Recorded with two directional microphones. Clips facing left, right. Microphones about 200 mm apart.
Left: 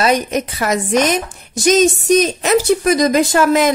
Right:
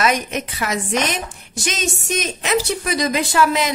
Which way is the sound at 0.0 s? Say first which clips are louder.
Left 5 dB; 35° left (ahead or behind).